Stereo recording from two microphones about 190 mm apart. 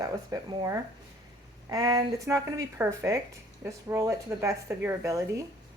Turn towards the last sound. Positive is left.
turn(degrees=-15)  # may be behind; listen again after turning